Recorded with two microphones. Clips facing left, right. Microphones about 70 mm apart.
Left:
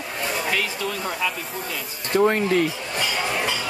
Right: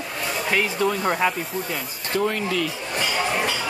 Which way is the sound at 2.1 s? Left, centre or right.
Left.